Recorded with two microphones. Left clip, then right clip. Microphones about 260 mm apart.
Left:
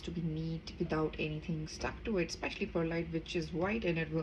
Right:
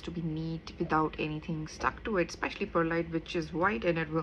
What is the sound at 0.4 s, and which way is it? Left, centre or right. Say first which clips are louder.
Speech: right 4 dB; centre.